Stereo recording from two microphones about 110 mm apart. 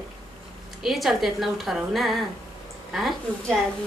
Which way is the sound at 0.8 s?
Centre (ahead or behind).